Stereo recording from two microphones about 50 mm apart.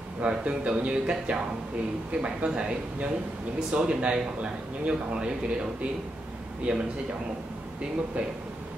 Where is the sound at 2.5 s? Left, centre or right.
Centre.